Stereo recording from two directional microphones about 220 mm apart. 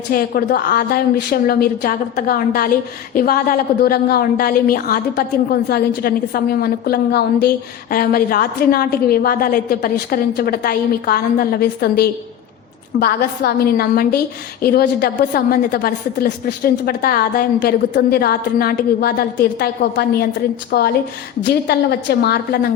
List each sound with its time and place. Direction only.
0.1 s a woman's voice: 40° left (ahead or behind)